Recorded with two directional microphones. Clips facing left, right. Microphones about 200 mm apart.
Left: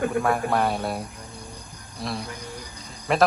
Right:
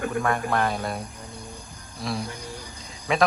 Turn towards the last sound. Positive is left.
turn(degrees=0)  # may be behind; listen again after turning